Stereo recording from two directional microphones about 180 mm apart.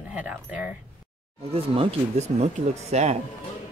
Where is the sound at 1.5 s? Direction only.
35° right (ahead or behind).